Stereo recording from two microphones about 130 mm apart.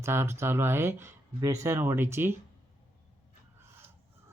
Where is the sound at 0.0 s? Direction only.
20° right (ahead or behind).